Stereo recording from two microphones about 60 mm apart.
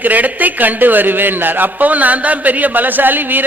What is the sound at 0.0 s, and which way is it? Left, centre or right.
A man's voice, right.